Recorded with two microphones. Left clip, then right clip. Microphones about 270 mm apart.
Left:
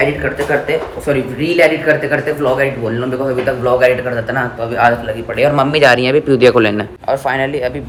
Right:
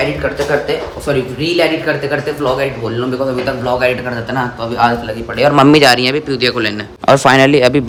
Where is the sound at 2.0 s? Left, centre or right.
Centre.